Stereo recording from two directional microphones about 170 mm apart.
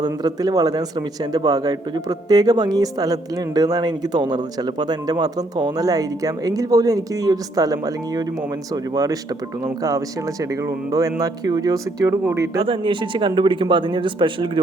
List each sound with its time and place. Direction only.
0.0 s a man's voice: 25° right (ahead or behind)
10.5 s a man's voice: 20° right (ahead or behind)
12.6 s a man's voice: 30° right (ahead or behind)